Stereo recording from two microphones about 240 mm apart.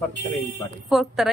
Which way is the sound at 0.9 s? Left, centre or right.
Centre.